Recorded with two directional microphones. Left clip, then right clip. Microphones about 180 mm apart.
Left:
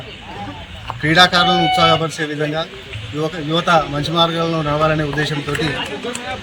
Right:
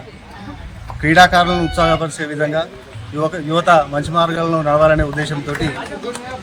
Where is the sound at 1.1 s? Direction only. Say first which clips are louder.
Right 1 dB; 10° right (ahead or behind).